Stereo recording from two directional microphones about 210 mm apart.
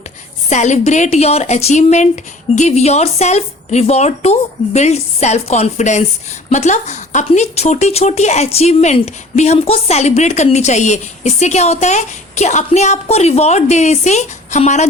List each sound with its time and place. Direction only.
0.5 s speech: 35° left (ahead or behind)